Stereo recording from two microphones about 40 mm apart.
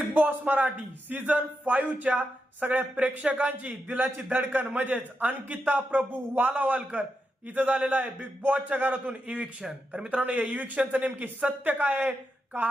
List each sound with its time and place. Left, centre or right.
0.1 s a man's voice: right
9.6 s speech: right
10.1 s a man's voice: right